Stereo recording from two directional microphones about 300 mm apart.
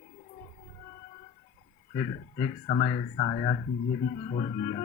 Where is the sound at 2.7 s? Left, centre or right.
Centre.